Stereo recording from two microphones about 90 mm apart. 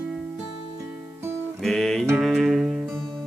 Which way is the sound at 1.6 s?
5° left (ahead or behind).